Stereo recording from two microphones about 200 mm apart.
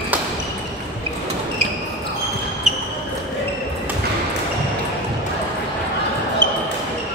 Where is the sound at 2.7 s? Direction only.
Centre (ahead or behind).